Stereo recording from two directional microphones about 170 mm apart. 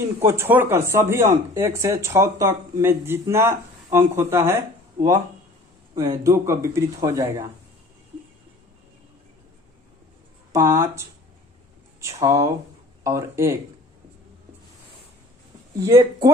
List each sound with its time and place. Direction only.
0.2 s speech: 15° right (ahead or behind)
5.9 s speech: 20° right (ahead or behind)
10.5 s speech: 20° right (ahead or behind)
12.0 s speech: 20° right (ahead or behind)
15.8 s speech: 20° right (ahead or behind)